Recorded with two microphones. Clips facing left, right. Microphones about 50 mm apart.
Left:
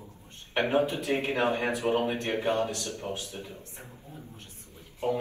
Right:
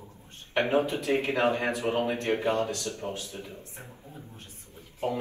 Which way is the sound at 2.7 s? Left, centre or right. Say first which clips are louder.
Right 1 dB; left.